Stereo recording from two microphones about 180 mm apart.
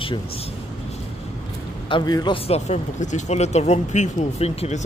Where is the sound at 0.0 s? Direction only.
30° left (ahead or behind).